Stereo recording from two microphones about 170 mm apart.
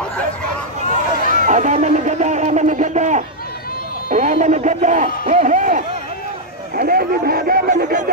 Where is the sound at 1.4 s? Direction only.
45° right (ahead or behind).